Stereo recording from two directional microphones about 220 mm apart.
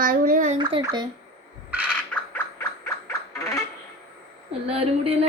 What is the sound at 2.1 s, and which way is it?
Mechanisms, 5° left (ahead or behind).